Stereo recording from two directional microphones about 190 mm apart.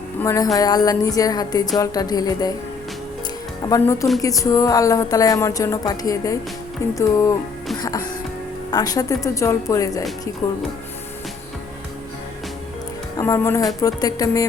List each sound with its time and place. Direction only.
0.2 s speech: 15° left (ahead or behind)
3.7 s speech: 15° left (ahead or behind)
13.1 s speech: 15° left (ahead or behind)